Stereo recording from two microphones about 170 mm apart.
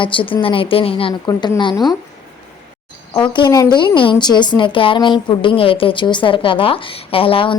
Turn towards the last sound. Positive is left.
turn(degrees=30)  # may be behind; listen again after turning